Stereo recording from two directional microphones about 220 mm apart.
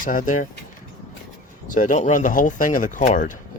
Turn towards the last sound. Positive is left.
turn(degrees=35)  # may be behind; listen again after turning